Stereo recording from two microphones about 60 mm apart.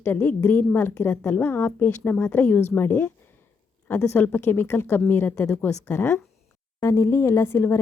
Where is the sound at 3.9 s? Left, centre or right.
Left.